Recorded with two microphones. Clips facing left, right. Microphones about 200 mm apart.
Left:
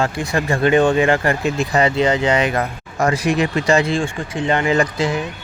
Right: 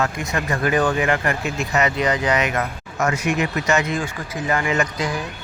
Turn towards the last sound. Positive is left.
turn(degrees=25)  # may be behind; listen again after turning